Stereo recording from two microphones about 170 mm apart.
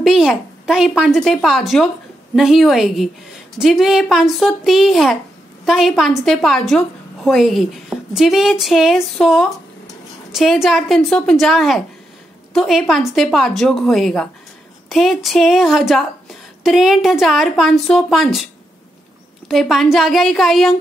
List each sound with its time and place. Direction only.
0.0 s a woman's voice: 5° right (ahead or behind)